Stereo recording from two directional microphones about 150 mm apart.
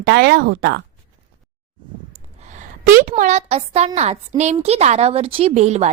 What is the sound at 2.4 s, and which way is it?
A woman's voice, 55° right (ahead or behind).